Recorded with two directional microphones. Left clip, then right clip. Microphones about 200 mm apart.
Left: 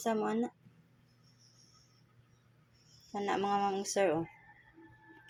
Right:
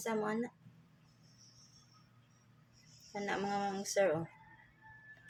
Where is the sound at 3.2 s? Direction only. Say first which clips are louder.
Left 5 dB; 20° left (ahead or behind).